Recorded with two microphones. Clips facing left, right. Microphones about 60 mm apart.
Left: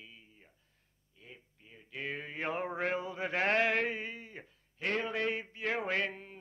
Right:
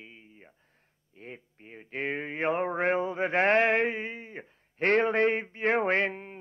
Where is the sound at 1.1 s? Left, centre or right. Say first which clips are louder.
Right 10 dB; right.